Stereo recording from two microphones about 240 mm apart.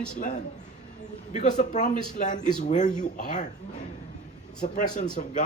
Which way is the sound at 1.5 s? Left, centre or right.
Left.